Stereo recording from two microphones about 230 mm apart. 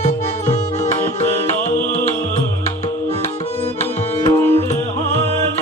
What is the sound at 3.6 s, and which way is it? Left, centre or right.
Tabla, left.